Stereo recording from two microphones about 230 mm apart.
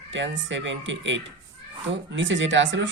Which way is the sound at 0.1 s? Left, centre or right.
Right.